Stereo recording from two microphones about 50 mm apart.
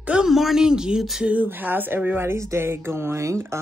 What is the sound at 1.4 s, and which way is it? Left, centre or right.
Speech, right.